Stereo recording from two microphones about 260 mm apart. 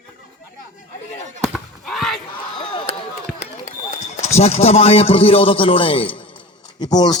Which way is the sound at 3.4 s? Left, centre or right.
Left.